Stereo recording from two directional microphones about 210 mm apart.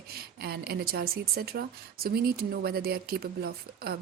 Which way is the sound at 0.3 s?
50° right (ahead or behind).